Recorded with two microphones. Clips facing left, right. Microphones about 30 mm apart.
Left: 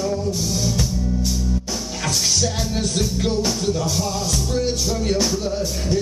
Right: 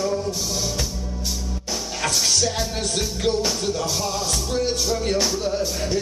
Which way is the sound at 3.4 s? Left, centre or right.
Centre.